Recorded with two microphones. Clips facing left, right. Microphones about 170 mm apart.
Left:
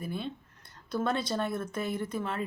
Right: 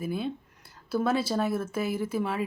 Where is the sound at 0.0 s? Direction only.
5° right (ahead or behind).